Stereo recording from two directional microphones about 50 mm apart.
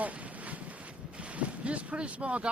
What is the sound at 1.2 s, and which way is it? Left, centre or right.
Boat, right.